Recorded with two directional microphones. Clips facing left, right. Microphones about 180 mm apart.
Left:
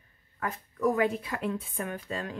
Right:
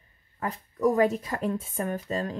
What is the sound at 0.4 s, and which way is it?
Speech, 35° right (ahead or behind).